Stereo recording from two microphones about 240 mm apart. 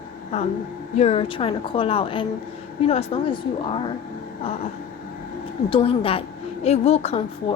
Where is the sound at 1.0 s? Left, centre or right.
Left.